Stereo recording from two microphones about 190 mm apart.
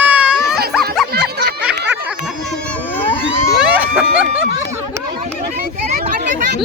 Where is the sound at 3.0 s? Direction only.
25° left (ahead or behind).